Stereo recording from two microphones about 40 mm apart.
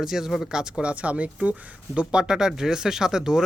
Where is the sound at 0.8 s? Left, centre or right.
Right.